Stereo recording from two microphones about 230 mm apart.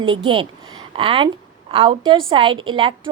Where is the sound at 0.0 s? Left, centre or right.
Right.